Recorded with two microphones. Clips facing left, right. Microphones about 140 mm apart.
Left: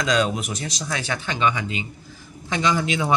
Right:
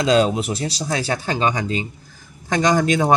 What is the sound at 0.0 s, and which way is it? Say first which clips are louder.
Speech: right 5 dB; 30° right (ahead or behind).